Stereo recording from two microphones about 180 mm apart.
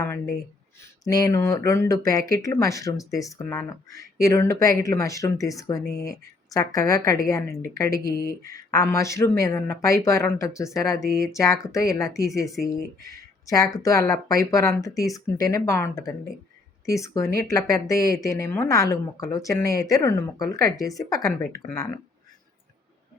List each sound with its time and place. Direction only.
0.0 s a woman's voice: 15° left (ahead or behind)
8.0 s speech: 55° left (ahead or behind)
8.4 s a woman's voice: 20° left (ahead or behind)
13.1 s a sound: 20° left (ahead or behind)
13.7 s a woman's voice: 15° left (ahead or behind)